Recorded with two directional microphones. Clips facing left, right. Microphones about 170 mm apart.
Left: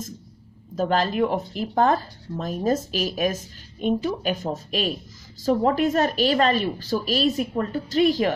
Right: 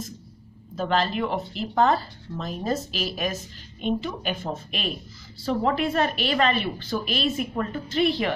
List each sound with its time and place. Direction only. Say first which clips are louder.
0.7 s speech: left 3 dB; 45° left (ahead or behind)